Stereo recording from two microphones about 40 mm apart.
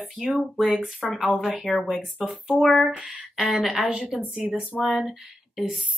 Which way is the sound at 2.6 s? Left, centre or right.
Centre.